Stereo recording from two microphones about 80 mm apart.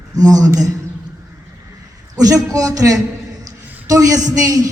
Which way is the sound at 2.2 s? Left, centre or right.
Right.